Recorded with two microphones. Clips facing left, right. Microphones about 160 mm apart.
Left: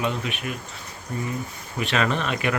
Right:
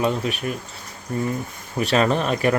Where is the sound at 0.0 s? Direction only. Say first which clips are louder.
Right 5 dB; 40° right (ahead or behind).